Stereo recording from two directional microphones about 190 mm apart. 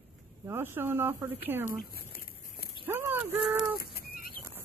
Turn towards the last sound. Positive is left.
turn(degrees=50)  # may be behind; listen again after turning